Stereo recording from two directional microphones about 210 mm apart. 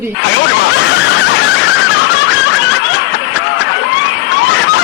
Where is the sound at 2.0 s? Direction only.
65° left (ahead or behind).